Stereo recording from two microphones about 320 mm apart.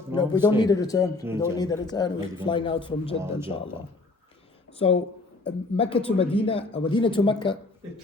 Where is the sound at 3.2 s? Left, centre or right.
Centre.